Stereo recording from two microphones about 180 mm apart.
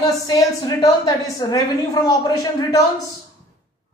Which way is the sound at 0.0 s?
20° left (ahead or behind).